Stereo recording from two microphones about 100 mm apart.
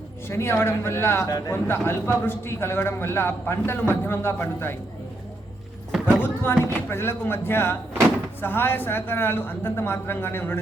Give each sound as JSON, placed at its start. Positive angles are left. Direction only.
{"t": 0.3, "sound": "a man's voice", "side_deg": 25}
{"t": 1.3, "sound": "a man's voice", "side_deg": 35}
{"t": 1.6, "sound": "a man's voice", "side_deg": 20}
{"t": 5.9, "sound": "a sound", "side_deg": -10}
{"t": 6.2, "sound": "a sound", "side_deg": 25}
{"t": 6.7, "sound": "a man's voice", "side_deg": 20}